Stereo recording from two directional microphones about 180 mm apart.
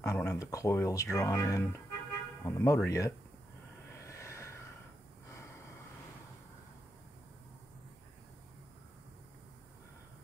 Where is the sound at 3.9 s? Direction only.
15° left (ahead or behind).